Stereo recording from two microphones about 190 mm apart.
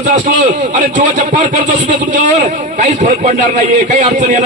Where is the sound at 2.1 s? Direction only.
40° right (ahead or behind).